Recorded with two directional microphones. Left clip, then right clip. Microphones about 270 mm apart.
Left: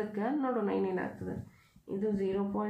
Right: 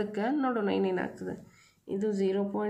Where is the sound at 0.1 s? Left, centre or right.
Right.